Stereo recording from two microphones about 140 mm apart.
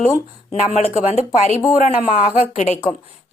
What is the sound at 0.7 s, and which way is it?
Speech, 50° left (ahead or behind).